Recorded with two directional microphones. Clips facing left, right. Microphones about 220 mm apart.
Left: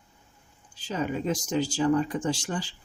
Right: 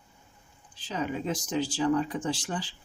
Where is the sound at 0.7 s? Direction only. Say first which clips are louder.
Left 2 dB; 45° left (ahead or behind).